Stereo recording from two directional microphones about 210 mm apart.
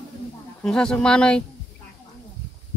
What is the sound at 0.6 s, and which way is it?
Speech, 5° left (ahead or behind).